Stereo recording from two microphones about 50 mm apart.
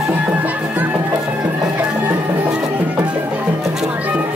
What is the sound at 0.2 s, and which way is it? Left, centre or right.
Music, right.